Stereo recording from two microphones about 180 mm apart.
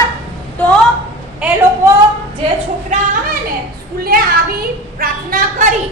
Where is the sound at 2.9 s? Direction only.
40° right (ahead or behind).